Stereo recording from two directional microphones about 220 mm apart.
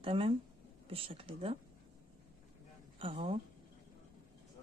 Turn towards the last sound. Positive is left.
turn(degrees=-25)  # may be behind; listen again after turning